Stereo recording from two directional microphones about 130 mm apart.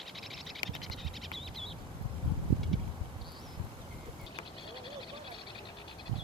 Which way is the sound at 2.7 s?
Centre (ahead or behind).